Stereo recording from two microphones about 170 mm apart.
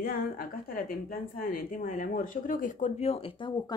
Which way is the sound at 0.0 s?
60° left (ahead or behind).